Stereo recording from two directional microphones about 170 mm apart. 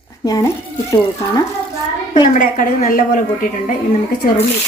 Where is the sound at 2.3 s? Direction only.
50° left (ahead or behind).